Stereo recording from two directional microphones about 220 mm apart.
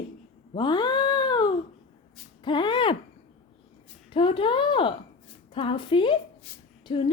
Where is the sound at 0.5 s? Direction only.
20° left (ahead or behind).